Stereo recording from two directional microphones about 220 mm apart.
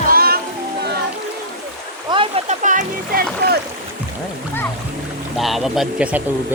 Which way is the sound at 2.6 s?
40° right (ahead or behind).